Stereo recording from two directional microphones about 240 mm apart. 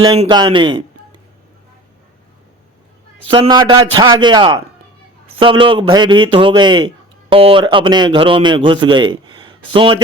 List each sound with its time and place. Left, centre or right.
0.0 s a man's voice: centre
3.2 s a man's voice: right